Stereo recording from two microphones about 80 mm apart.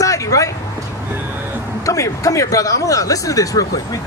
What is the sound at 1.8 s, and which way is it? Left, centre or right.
Speech, left.